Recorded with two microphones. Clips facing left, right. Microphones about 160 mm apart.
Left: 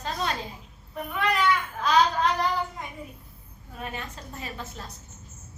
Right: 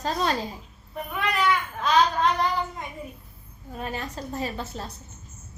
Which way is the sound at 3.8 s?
35° right (ahead or behind).